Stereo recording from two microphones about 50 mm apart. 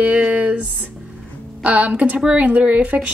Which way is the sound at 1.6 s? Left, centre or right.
Right.